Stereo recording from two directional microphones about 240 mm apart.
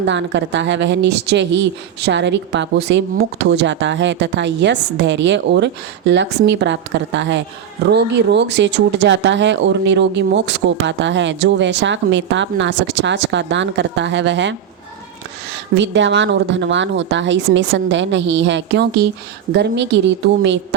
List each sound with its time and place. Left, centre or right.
0.0 s a woman's voice: right
15.7 s a woman's voice: right